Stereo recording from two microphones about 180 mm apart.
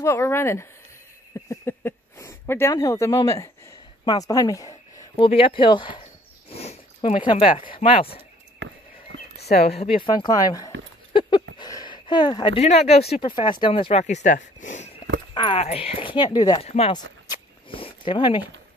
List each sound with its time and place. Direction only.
0.0 s speech: 15° left (ahead or behind)
5.2 s speech: 30° left (ahead or behind)
8.5 s a sound: 90° right
9.5 s speech: 35° left (ahead or behind)
10.3 s speech: 20° left (ahead or behind)
11.1 s a sound: 25° left (ahead or behind)
11.5 s speech: 25° left (ahead or behind); by 14.9 s 45° left (ahead or behind)
15.3 s speech: 30° left (ahead or behind)
16.9 s a sound: 25° left (ahead or behind)